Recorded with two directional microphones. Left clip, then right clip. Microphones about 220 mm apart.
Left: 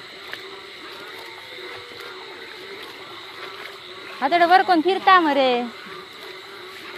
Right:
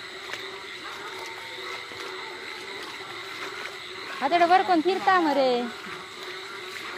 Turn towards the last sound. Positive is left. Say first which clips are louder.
# left 4 dB
turn(degrees=15)  # may be behind; listen again after turning